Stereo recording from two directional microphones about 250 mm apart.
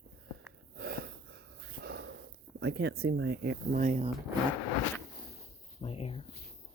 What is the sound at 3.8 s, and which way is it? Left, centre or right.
Speech, right.